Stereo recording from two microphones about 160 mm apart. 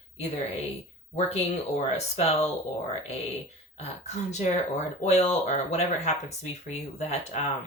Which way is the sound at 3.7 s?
45° left (ahead or behind).